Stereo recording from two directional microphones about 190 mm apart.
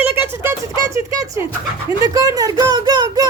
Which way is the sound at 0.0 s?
10° right (ahead or behind).